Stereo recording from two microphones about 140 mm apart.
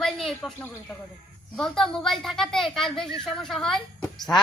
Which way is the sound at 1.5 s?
Centre (ahead or behind).